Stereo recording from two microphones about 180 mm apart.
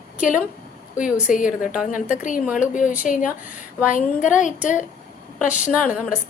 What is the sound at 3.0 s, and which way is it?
A woman's voice, 45° left (ahead or behind).